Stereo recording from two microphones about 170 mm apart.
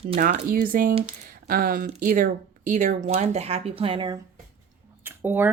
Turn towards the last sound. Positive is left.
turn(degrees=-10)  # may be behind; listen again after turning